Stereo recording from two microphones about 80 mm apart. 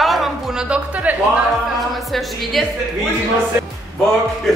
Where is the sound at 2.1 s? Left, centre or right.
Centre.